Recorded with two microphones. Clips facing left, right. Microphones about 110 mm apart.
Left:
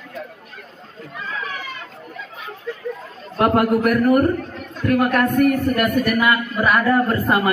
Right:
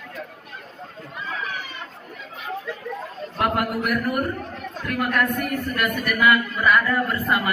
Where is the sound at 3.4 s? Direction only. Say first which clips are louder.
Left 7 dB; 40° left (ahead or behind).